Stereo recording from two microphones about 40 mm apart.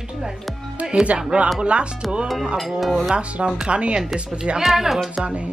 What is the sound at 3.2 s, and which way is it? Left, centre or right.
Speech, right.